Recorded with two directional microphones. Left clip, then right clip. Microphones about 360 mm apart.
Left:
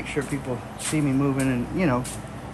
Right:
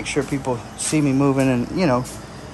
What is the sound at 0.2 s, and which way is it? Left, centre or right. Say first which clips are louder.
A woman's voice: right 6 dB; centre.